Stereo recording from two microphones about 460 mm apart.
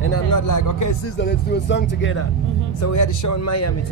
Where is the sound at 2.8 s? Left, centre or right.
Left.